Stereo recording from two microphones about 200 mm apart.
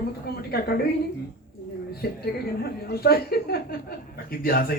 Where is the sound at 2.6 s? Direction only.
50° left (ahead or behind).